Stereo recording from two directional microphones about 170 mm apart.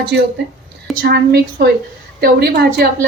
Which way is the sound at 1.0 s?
65° right (ahead or behind).